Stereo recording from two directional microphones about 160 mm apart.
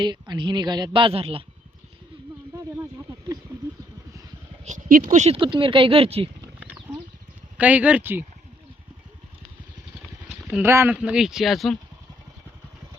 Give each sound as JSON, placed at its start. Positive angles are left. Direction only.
{"t": 0.0, "sound": "speech", "side_deg": -30}
{"t": 4.6, "sound": "speech", "side_deg": -55}
{"t": 5.4, "sound": "speech", "side_deg": -30}
{"t": 7.6, "sound": "speech", "side_deg": -10}
{"t": 10.6, "sound": "speech", "side_deg": -15}